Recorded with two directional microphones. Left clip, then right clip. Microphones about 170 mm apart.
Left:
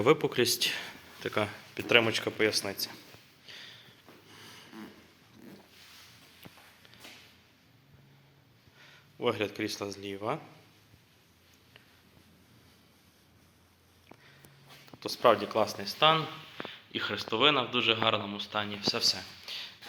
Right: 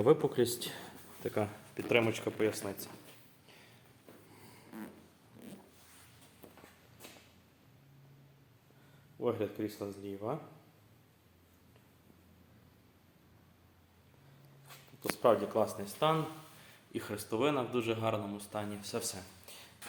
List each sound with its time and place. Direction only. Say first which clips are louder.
0.0 s speech: left 2 dB; 35° left (ahead or behind)
0.3 s speech: left 6 dB; centre (ahead or behind)
3.4 s a sound: left 15 dB; centre (ahead or behind)
9.2 s speech: left 4 dB; 5° left (ahead or behind)
15.1 s a man's voice: left 4 dB; 5° left (ahead or behind)
19.1 s a sound: left 10 dB; centre (ahead or behind)